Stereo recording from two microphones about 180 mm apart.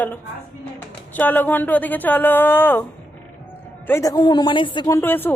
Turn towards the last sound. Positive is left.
turn(degrees=10)  # may be behind; listen again after turning